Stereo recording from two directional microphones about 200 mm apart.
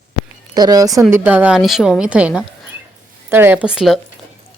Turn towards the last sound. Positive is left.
turn(degrees=0)  # may be behind; listen again after turning